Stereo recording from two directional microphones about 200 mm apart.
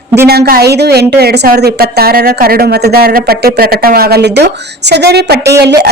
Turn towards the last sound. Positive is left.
turn(degrees=-55)  # may be behind; listen again after turning